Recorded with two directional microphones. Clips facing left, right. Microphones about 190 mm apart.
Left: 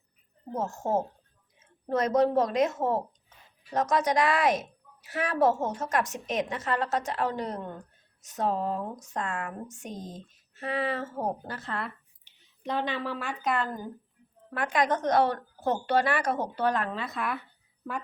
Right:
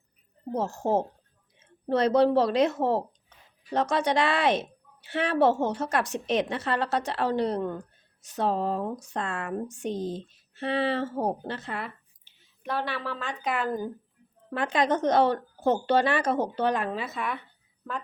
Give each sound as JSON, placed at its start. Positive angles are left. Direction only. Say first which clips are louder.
{"t": 0.5, "sound": "a woman's voice", "louder": "right 3 dB", "side_deg": -35}
{"t": 12.2, "sound": "a sound", "louder": "left 2 dB", "side_deg": 15}
{"t": 13.4, "sound": "speech", "louder": "left 1 dB", "side_deg": 0}
{"t": 14.5, "sound": "speech", "louder": "right 2 dB", "side_deg": -25}